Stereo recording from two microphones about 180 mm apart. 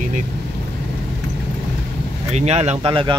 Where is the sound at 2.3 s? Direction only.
35° right (ahead or behind).